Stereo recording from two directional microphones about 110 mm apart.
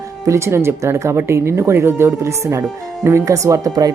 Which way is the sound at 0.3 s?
25° right (ahead or behind).